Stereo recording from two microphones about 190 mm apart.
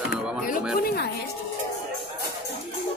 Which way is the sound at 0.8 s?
55° left (ahead or behind).